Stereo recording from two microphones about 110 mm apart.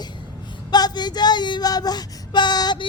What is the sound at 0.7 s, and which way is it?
Child singing, 40° left (ahead or behind).